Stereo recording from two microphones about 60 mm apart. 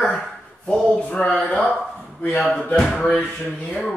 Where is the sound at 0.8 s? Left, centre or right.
Left.